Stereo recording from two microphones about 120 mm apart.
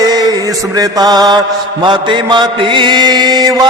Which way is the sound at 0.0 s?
35° right (ahead or behind).